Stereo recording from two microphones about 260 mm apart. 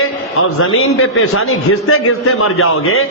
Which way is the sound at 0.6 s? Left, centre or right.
Left.